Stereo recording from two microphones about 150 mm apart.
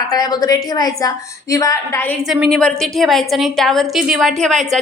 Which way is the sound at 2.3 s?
Centre (ahead or behind).